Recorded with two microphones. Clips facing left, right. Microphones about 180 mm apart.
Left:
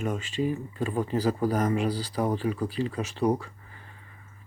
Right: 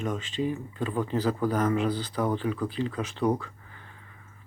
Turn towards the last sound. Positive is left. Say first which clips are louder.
# left 1 dB
turn(degrees=10)  # may be behind; listen again after turning